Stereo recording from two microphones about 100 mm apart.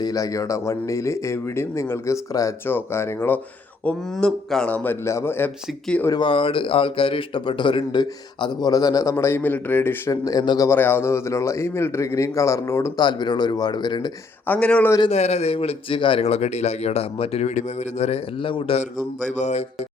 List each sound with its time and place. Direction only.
0.0 s a man's voice: 35° left (ahead or behind); by 3.4 s 20° left (ahead or behind)
4.1 s speech: 5° left (ahead or behind)
4.7 s a man's voice: 20° left (ahead or behind)
6.1 s speech: 60° left (ahead or behind); by 10.0 s 20° left (ahead or behind)
10.1 s speech: 40° left (ahead or behind)
10.7 s a man's voice: 20° left (ahead or behind)
13.0 s speech: 50° left (ahead or behind)
14.4 s a man's voice: 15° left (ahead or behind)
15.1 s speech: 90° left; by 18.8 s 60° left (ahead or behind)